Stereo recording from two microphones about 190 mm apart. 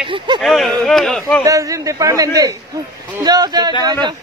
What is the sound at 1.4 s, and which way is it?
A man's voice, 15° right (ahead or behind).